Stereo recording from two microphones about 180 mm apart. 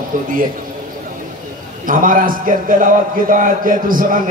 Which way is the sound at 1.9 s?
50° right (ahead or behind).